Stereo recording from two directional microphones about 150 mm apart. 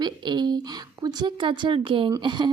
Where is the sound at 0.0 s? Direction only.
30° right (ahead or behind).